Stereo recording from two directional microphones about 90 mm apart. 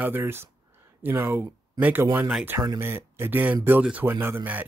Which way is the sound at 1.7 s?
15° right (ahead or behind).